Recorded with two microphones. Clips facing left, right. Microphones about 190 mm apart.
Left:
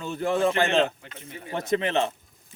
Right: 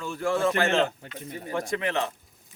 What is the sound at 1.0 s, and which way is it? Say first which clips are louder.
Speech: right 4 dB; 40° right (ahead or behind).